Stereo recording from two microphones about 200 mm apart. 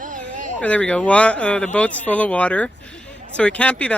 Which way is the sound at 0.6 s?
5° left (ahead or behind).